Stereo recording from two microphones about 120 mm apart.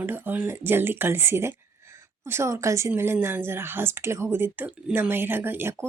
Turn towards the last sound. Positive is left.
turn(degrees=-20)  # may be behind; listen again after turning